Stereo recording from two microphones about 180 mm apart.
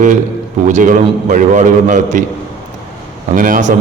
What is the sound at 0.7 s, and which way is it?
A man's voice, 45° right (ahead or behind).